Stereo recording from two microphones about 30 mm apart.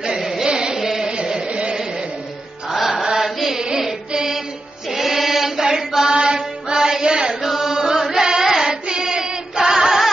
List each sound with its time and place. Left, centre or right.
0.5 s carnatic music: right
0.7 s music: centre
1.1 s chant: right
1.5 s a sound: right
3.0 s chant: centre
3.7 s music: centre
4.9 s chant: centre; by 7.3 s right
7.4 s chant: centre
8.3 s singing: right
8.6 s child singing: right
9.0 s female singing: right